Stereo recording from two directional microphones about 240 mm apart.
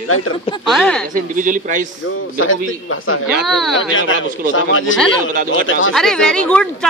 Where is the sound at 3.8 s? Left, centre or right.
Left.